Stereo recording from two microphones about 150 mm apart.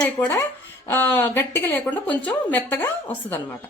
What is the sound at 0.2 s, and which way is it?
A woman's voice, 15° left (ahead or behind).